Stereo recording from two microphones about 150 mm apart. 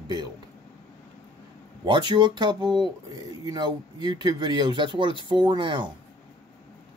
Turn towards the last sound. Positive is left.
turn(degrees=-30)  # may be behind; listen again after turning